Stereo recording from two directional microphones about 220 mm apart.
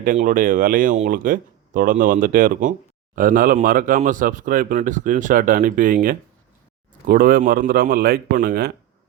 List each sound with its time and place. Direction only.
0.0 s a man's voice: 40° right (ahead or behind)